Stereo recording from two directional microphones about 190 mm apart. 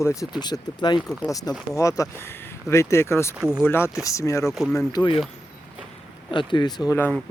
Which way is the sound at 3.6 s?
10° left (ahead or behind).